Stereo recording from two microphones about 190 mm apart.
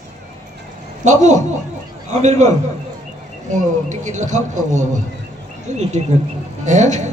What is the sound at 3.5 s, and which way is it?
A man's voice, 40° right (ahead or behind).